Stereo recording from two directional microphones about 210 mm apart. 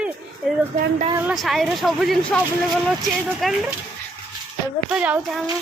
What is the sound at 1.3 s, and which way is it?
Speech, centre (ahead or behind).